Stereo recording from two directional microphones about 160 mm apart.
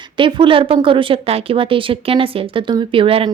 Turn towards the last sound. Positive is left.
turn(degrees=-35)  # may be behind; listen again after turning